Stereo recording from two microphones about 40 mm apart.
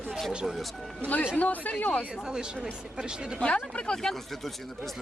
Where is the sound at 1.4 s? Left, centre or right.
Left.